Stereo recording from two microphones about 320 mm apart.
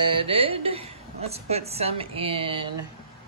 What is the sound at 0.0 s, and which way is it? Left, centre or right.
A woman's voice, centre.